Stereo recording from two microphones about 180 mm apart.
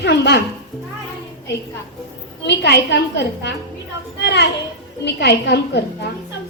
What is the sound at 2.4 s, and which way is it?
A woman's voice, 70° left (ahead or behind).